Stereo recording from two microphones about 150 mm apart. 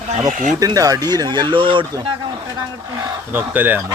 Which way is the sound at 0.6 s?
25° right (ahead or behind).